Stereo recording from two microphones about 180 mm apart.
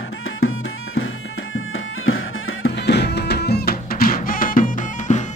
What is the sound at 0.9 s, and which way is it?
Music, 90° left.